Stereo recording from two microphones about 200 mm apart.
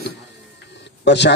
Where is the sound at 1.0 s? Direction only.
60° left (ahead or behind).